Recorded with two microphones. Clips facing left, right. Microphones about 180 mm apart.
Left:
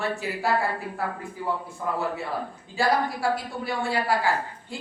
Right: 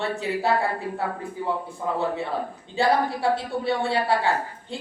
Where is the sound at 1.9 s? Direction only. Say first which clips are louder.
Right 2 dB; 25° right (ahead or behind).